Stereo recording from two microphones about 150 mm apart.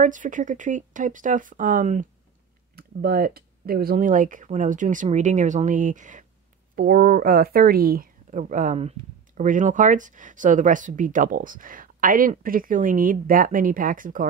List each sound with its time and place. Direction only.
0.0 s speech: 60° right (ahead or behind)
2.7 s speech: 90° right; by 6.2 s 60° right (ahead or behind)
6.7 s speech: 70° right (ahead or behind)